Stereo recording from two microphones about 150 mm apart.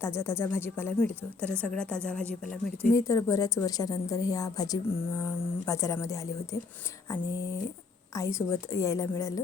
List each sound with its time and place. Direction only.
0.0 s a woman's voice: 15° left (ahead or behind)
2.9 s a woman's voice: 20° left (ahead or behind)
8.1 s a woman's voice: 20° left (ahead or behind)